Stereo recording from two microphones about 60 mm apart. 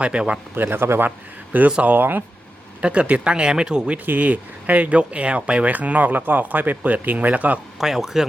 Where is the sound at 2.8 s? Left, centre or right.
Centre.